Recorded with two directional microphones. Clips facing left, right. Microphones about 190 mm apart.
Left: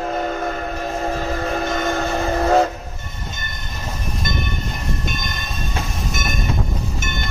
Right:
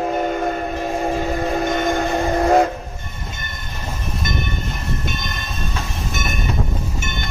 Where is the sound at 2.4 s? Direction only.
10° right (ahead or behind).